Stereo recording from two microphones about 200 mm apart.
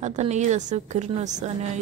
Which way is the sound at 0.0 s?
35° right (ahead or behind).